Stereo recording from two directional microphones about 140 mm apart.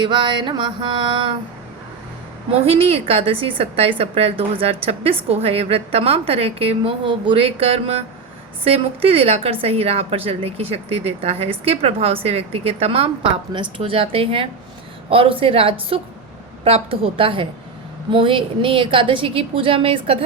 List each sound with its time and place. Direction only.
0.0 s a woman's voice: 35° right (ahead or behind)
2.5 s a woman's voice: 45° right (ahead or behind)